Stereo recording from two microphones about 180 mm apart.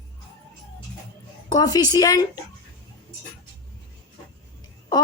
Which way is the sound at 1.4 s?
20° left (ahead or behind).